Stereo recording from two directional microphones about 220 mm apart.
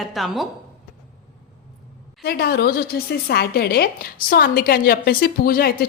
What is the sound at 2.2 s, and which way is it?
A woman's voice, 45° left (ahead or behind).